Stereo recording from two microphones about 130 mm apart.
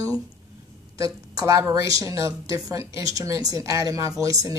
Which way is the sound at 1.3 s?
25° right (ahead or behind).